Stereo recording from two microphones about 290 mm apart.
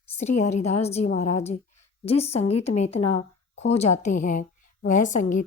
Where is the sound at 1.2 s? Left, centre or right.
Left.